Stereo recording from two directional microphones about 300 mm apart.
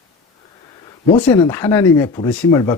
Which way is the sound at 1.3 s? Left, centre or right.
Centre.